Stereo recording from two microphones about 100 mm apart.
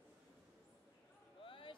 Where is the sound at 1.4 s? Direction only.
60° left (ahead or behind).